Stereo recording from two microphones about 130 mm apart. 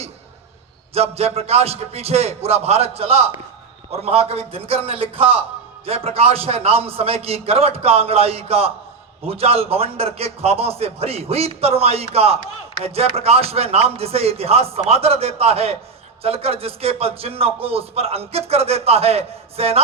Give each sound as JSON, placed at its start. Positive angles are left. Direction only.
{"t": 0.9, "sound": "a man's voice", "side_deg": -50}